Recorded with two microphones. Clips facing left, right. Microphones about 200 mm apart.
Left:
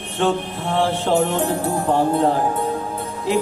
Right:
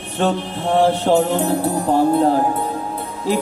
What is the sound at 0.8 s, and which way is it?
Speech, 40° right (ahead or behind).